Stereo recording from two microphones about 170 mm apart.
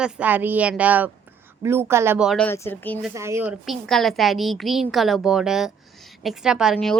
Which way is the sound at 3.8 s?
Centre (ahead or behind).